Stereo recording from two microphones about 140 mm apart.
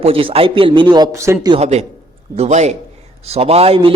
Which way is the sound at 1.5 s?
50° right (ahead or behind).